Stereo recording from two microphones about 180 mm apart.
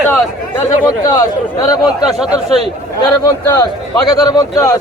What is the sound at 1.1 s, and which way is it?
Speech, 20° left (ahead or behind).